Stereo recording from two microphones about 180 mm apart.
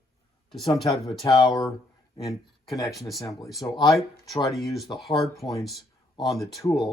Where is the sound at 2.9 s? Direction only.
Centre (ahead or behind).